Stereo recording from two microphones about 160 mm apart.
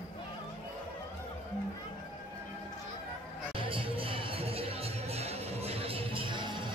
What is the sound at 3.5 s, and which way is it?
Music, 35° right (ahead or behind).